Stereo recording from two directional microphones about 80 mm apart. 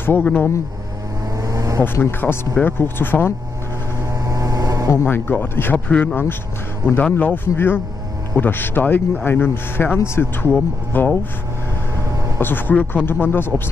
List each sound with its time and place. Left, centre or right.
0.0 s speech: left
1.4 s vehicle: right
1.8 s speech: left
4.1 s vehicle: right
4.8 s speech: left
12.4 s speech: left